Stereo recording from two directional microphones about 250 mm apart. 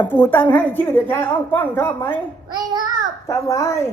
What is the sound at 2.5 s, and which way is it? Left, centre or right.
Child singing, centre.